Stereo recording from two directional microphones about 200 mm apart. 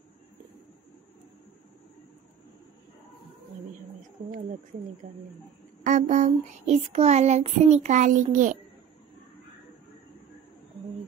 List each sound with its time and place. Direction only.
5.0 s speech: 45° right (ahead or behind)
5.9 s child singing: 35° right (ahead or behind)